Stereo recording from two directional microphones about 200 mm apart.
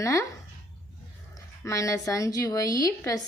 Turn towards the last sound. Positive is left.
turn(degrees=15)  # may be behind; listen again after turning